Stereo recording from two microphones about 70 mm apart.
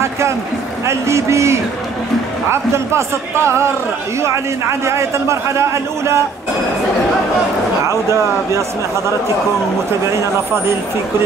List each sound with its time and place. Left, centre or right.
0.8 s a man's voice: right
7.8 s a man's voice: right